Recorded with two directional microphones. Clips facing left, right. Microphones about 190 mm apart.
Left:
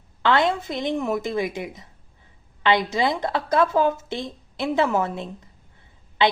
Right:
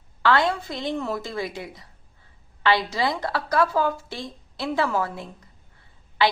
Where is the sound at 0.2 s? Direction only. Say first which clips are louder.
Left 1 dB; 20° left (ahead or behind).